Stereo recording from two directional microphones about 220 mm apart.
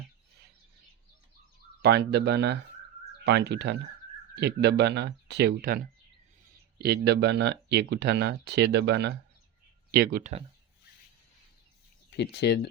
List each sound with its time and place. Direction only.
1.8 s speech: 50° right (ahead or behind)
12.1 s speech: 50° left (ahead or behind)